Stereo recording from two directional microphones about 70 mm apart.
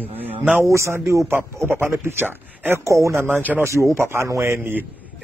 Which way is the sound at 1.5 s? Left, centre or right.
Right.